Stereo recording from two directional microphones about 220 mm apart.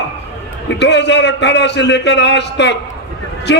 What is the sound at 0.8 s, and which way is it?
A man's voice, 50° left (ahead or behind).